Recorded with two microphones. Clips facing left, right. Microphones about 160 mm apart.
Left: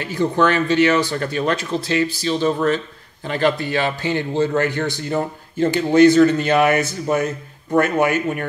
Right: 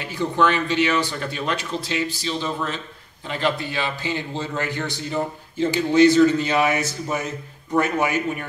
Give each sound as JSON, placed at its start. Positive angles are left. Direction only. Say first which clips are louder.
{"t": 0.4, "sound": "a man's voice", "louder": "left 3 dB", "side_deg": 45}